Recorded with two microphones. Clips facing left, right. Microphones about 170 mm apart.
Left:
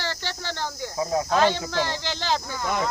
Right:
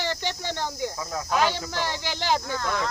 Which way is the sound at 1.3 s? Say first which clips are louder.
Left 1 dB; 10° right (ahead or behind).